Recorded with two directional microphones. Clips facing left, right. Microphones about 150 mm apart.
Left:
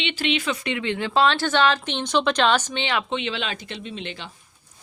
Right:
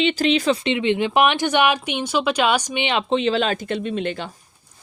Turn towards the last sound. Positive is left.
turn(degrees=-50)  # may be behind; listen again after turning